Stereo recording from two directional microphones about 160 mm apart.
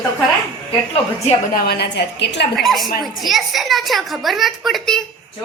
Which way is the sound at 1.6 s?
85° left.